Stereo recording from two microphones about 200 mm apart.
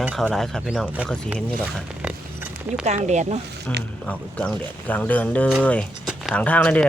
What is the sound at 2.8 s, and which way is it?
Speech, 35° right (ahead or behind).